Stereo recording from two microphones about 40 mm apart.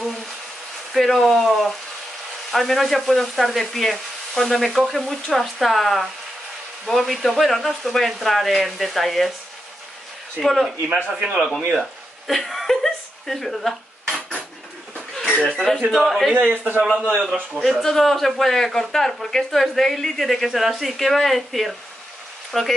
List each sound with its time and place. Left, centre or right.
0.9 s sizzle: centre
10.4 s sizzle: centre
10.9 s a man's voice: right
11.8 s a sound: centre
15.1 s a sound: centre
15.9 s sizzle: centre
16.3 s a man's voice: right
17.1 s a man's voice: centre
17.6 s speech: centre
20.8 s sizzle: centre
22.5 s speech: centre